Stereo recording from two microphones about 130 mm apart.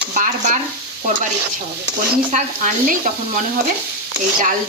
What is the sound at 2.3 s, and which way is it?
Speech, 70° right (ahead or behind).